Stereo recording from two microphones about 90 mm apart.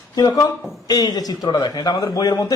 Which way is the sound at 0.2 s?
45° left (ahead or behind).